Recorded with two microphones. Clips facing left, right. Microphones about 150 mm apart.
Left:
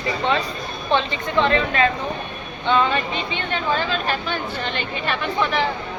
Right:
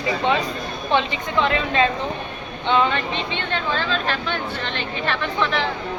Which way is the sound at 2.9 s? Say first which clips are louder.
Left 1 dB; 10° left (ahead or behind).